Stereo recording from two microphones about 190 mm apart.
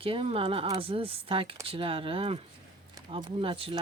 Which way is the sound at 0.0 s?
30° right (ahead or behind).